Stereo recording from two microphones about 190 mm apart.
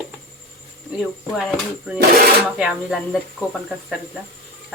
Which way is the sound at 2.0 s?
55° right (ahead or behind).